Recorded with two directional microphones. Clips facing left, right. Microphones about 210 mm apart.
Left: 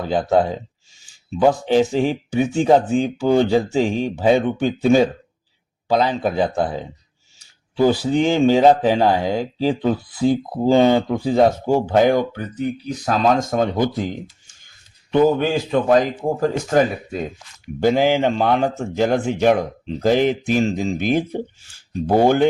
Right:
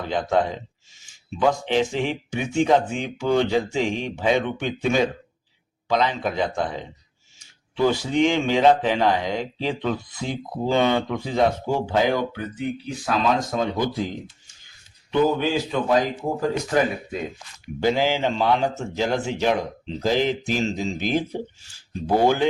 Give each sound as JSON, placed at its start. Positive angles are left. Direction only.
{"t": 0.1, "sound": "speech", "side_deg": 35}
{"t": 1.5, "sound": "speech", "side_deg": 40}
{"t": 15.1, "sound": "speech", "side_deg": 50}